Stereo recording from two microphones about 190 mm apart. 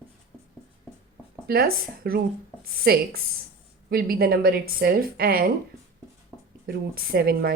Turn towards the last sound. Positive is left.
turn(degrees=-55)  # may be behind; listen again after turning